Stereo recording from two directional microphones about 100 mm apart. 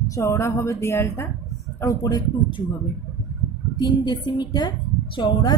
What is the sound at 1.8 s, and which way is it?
Speech, 35° left (ahead or behind).